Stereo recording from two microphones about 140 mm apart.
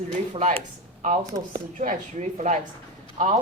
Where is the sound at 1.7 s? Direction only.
60° right (ahead or behind).